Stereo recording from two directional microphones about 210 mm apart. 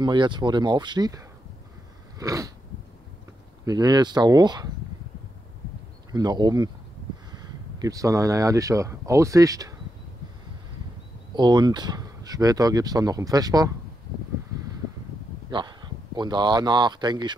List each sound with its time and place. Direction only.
0.0 s speech: 20° right (ahead or behind)
2.1 s a sound: 15° right (ahead or behind)
3.6 s speech: 20° right (ahead or behind)
6.1 s speech: 20° right (ahead or behind)
11.3 s speech: 20° right (ahead or behind)
15.5 s speech: 20° right (ahead or behind)